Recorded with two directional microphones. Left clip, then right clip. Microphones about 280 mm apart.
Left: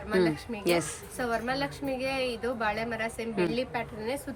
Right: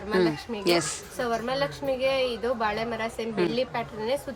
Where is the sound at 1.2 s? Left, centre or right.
Centre.